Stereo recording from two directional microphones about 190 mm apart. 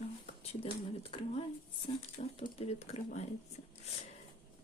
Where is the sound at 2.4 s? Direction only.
35° left (ahead or behind).